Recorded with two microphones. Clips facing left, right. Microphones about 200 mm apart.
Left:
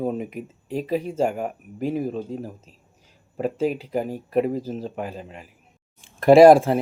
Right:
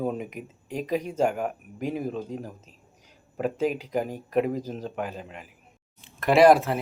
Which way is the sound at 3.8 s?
5° left (ahead or behind).